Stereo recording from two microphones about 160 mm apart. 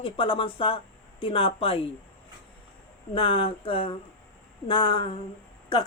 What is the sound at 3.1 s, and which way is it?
Speech, 35° left (ahead or behind).